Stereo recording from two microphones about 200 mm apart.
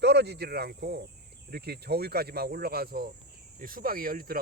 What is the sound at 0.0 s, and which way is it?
Speech, 55° right (ahead or behind).